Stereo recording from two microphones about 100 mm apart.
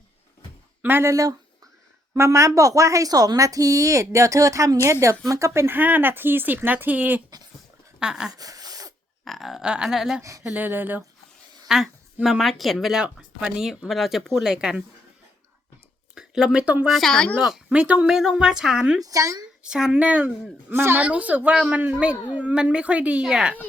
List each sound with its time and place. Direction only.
0.8 s a woman's voice: 20° right (ahead or behind)
7.9 s speech: 5° right (ahead or behind)
8.3 s a sound: 40° right (ahead or behind)
9.2 s speech: centre (ahead or behind)
10.2 s a woman's voice: 30° right (ahead or behind)
10.4 s a woman's voice: 15° right (ahead or behind)
11.7 s speech: 5° right (ahead or behind)
16.1 s speech: 5° right (ahead or behind)
17.4 s a woman's voice: 5° right (ahead or behind)
19.0 s a woman's voice: 35° right (ahead or behind)
19.6 s a woman's voice: 10° right (ahead or behind)